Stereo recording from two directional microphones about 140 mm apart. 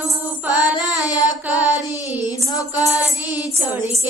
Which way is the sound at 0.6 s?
25° left (ahead or behind).